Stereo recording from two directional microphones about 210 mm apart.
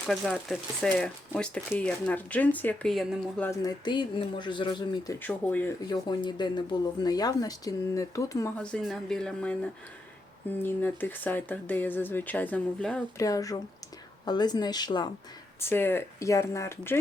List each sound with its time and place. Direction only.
0.1 s speech: centre (ahead or behind); by 5.1 s 20° left (ahead or behind)
5.2 s speech: 5° left (ahead or behind)
5.9 s speech: 20° left (ahead or behind); by 9.6 s 5° left (ahead or behind)
10.6 s speech: 10° left (ahead or behind)